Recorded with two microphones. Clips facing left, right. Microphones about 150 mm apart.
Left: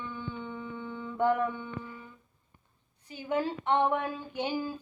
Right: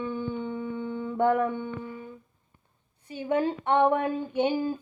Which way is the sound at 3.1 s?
25° right (ahead or behind).